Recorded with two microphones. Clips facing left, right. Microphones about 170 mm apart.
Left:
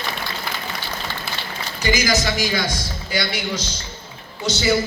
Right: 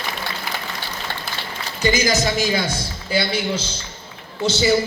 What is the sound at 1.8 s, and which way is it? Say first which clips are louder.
A man's voice: right 2 dB; 25° right (ahead or behind).